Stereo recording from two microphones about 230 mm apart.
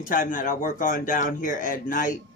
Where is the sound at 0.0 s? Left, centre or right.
Left.